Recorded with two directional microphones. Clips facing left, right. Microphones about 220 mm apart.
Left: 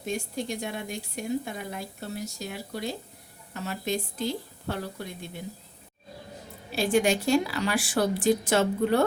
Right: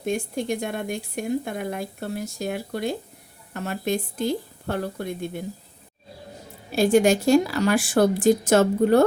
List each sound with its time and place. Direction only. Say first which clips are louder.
0.0 s speech: right 5 dB; 55° right (ahead or behind)
6.7 s speech: right 6 dB; 45° right (ahead or behind)